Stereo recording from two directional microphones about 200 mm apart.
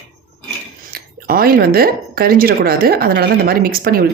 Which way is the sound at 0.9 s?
50° right (ahead or behind).